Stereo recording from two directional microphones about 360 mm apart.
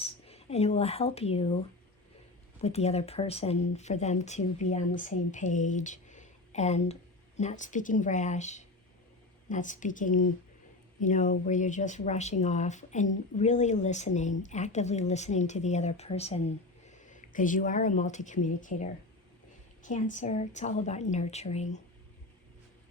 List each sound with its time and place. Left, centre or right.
0.0 s speech: centre
2.6 s speech: centre